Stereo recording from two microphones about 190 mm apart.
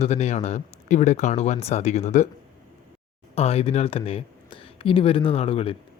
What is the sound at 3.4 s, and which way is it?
Speech, 30° left (ahead or behind).